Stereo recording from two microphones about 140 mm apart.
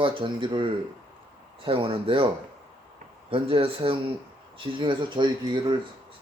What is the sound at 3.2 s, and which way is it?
Speech, 40° right (ahead or behind).